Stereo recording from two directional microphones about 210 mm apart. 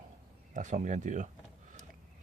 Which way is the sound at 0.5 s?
35° right (ahead or behind).